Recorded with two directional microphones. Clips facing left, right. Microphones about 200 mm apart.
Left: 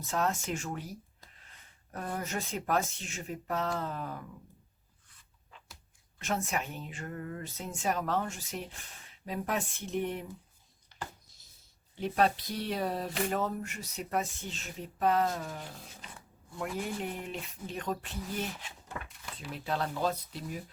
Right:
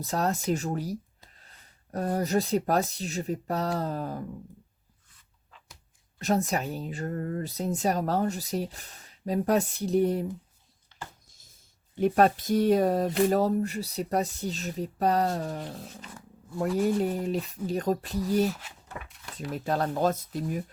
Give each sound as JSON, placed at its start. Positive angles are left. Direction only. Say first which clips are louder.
{"t": 0.0, "sound": "speech", "louder": "right 4 dB", "side_deg": -35}
{"t": 6.1, "sound": "speech", "louder": "right 7 dB", "side_deg": -35}
{"t": 11.3, "sound": "a sound", "louder": "right 3 dB", "side_deg": -50}
{"t": 11.9, "sound": "speech", "louder": "right 7 dB", "side_deg": -50}
{"t": 19.5, "sound": "speech", "louder": "right 6 dB", "side_deg": -45}